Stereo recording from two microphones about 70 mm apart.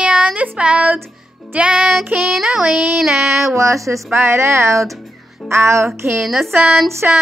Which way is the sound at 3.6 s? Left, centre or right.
Right.